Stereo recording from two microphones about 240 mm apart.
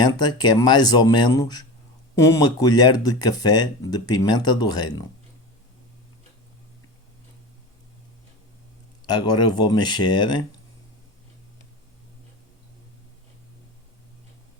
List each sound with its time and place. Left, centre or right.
0.0 s speech: centre
9.0 s speech: centre